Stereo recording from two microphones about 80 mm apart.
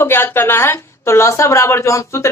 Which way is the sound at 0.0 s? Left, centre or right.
Left.